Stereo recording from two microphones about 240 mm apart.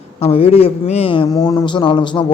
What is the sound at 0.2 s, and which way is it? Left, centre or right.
A man's voice, left.